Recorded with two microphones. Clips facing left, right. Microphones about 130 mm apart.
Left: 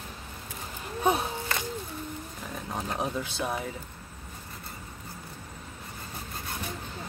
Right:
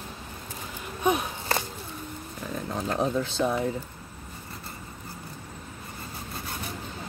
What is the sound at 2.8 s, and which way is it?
Speech, 10° left (ahead or behind).